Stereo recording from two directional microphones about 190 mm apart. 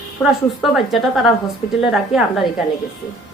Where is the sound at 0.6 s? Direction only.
Centre (ahead or behind).